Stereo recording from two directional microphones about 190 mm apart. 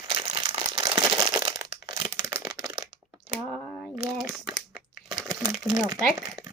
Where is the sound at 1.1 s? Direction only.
20° right (ahead or behind).